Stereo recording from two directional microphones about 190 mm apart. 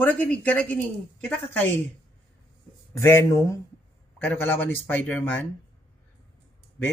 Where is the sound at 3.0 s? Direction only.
15° left (ahead or behind).